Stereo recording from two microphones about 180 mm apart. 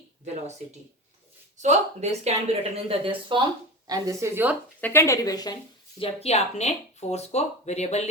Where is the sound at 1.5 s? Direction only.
40° right (ahead or behind); by 4.5 s 15° right (ahead or behind).